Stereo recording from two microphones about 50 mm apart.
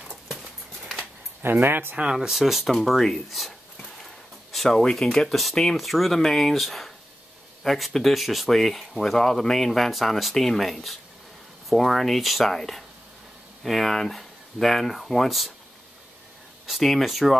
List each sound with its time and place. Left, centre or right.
0.0 s a sound: centre
1.4 s speech: right
2.1 s speech: centre
16.6 s speech: centre